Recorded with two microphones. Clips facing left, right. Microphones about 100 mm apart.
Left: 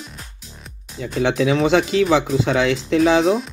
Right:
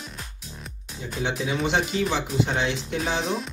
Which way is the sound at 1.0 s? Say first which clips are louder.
Left 9 dB; 90° left.